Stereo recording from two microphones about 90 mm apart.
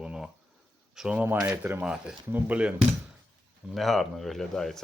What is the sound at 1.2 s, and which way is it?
Speech, 25° right (ahead or behind).